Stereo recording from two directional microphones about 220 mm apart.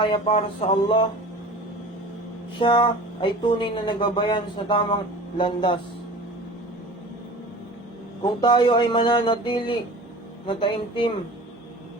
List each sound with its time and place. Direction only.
0.0 s speech: 25° left (ahead or behind)
2.6 s speech: 20° left (ahead or behind)
8.2 s speech: 20° left (ahead or behind)